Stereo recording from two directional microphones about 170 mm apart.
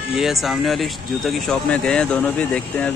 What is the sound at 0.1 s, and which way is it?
Speech, centre (ahead or behind).